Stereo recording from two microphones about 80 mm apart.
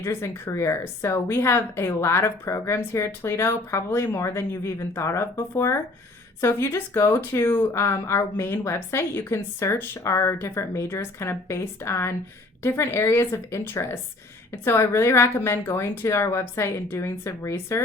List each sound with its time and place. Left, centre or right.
0.0 s speech: left